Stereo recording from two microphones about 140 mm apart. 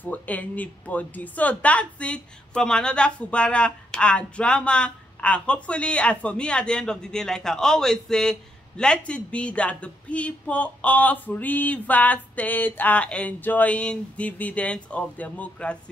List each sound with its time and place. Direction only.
0.0 s a man's voice: 10° left (ahead or behind)